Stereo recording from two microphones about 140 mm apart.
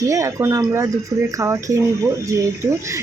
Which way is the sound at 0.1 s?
20° right (ahead or behind).